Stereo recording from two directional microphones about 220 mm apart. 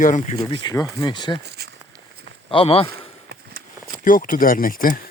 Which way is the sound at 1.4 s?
50° right (ahead or behind).